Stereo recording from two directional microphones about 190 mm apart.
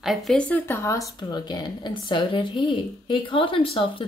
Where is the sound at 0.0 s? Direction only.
Centre (ahead or behind).